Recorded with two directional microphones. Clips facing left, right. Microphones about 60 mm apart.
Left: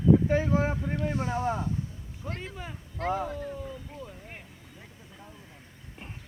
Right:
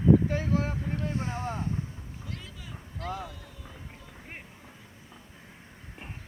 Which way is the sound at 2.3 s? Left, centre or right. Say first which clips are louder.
Left 7 dB; left.